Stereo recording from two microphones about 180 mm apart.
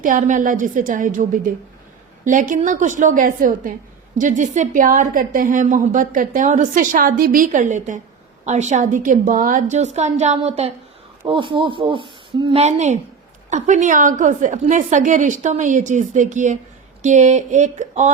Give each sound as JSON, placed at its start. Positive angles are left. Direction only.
{"t": 0.0, "sound": "a woman's voice", "side_deg": -45}
{"t": 12.6, "sound": "a woman's voice", "side_deg": -40}